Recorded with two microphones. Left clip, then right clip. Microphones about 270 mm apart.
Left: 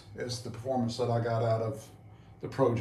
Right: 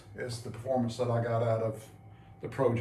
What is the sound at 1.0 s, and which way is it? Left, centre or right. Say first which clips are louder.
Speech: even; centre.